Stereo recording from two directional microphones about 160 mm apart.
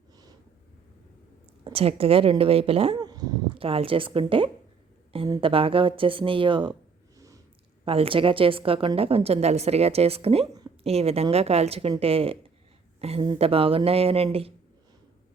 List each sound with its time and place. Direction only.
1.6 s a woman's voice: 35° right (ahead or behind)
3.0 s a sound: 25° right (ahead or behind)
3.6 s a woman's voice: 35° right (ahead or behind)
7.9 s a woman's voice: 35° right (ahead or behind)